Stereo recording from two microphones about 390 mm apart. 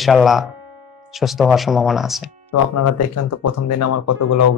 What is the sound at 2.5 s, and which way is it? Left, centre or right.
Speech, left.